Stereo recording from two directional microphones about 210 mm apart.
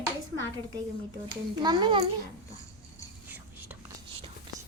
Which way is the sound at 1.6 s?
20° right (ahead or behind).